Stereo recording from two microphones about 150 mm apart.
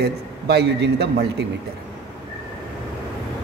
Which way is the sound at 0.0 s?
90° right.